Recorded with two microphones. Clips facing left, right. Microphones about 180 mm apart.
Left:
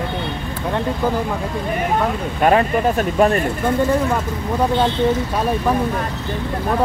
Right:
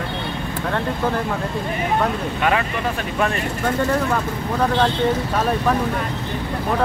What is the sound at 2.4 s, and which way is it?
Speech, 40° left (ahead or behind).